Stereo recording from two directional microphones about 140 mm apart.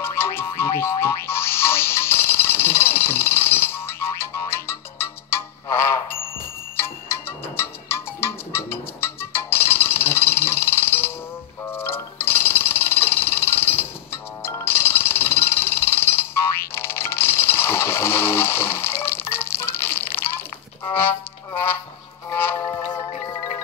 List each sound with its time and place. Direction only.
0.0 s music: 15° left (ahead or behind)